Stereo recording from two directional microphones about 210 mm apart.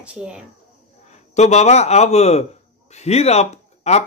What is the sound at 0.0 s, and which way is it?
Speech, 5° right (ahead or behind).